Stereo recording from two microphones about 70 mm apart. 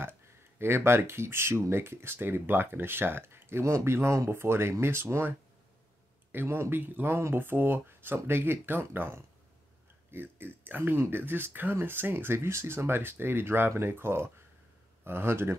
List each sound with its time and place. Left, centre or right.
0.0 s speech: right
6.3 s speech: right